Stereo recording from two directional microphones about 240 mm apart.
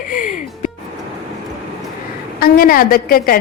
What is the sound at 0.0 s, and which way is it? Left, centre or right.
Music, left.